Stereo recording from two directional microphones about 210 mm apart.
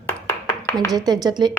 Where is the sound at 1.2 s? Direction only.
20° right (ahead or behind).